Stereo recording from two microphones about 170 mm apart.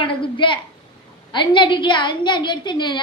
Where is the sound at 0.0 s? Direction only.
30° left (ahead or behind).